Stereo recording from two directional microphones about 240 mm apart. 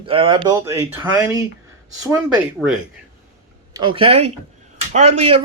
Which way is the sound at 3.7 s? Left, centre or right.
Centre.